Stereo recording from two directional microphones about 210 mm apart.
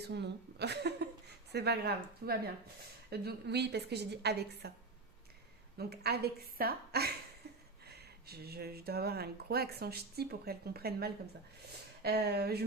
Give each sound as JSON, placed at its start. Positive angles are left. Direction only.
{"t": 0.0, "sound": "a sound", "side_deg": -50}
{"t": 1.5, "sound": "speech", "side_deg": -50}
{"t": 5.7, "sound": "speech", "side_deg": -50}